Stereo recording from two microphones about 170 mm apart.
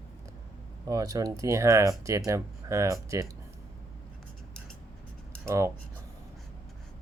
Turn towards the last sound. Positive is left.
turn(degrees=-15)  # may be behind; listen again after turning